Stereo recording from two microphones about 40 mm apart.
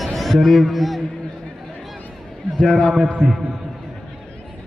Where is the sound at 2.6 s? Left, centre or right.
Centre.